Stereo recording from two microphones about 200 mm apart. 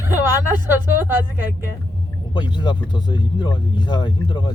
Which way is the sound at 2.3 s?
20° left (ahead or behind).